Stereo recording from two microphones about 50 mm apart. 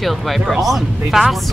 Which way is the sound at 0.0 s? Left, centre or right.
Centre.